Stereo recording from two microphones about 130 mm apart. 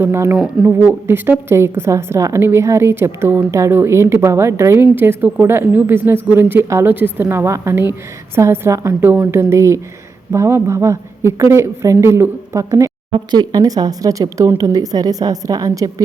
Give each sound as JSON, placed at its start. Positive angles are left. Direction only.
{"t": 0.0, "sound": "a woman's voice", "side_deg": -20}